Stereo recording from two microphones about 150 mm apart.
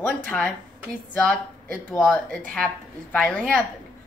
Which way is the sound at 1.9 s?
5° left (ahead or behind).